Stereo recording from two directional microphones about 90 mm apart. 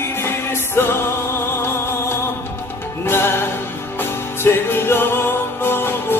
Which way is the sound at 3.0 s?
25° left (ahead or behind).